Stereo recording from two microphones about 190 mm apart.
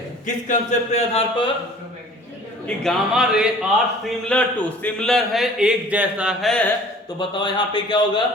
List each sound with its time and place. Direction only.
0.3 s speech: 40° left (ahead or behind)
2.6 s a man's voice: centre (ahead or behind)
7.2 s speech: 25° left (ahead or behind)